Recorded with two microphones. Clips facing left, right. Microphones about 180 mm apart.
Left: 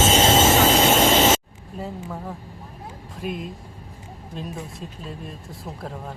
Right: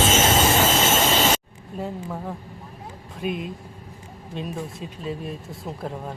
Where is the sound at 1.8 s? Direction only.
Centre (ahead or behind).